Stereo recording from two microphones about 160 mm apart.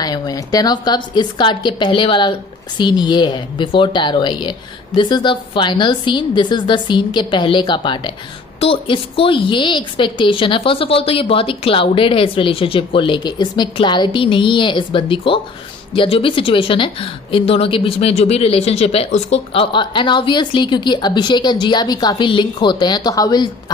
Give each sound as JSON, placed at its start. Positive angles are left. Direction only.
{"t": 0.0, "sound": "a woman's voice", "side_deg": 25}